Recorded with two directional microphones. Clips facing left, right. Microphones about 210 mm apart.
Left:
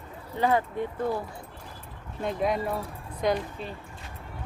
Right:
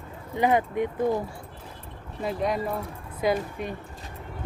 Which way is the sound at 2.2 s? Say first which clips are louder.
Even; centre (ahead or behind).